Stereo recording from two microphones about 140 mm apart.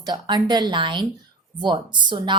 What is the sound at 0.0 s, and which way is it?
Speech, 30° right (ahead or behind).